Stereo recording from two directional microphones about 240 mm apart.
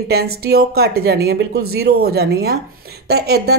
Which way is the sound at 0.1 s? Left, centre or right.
Right.